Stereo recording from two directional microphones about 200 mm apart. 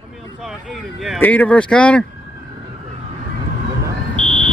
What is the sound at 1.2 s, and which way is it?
Speech, 10° left (ahead or behind).